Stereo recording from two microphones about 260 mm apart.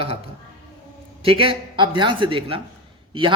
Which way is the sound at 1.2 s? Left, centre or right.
Centre.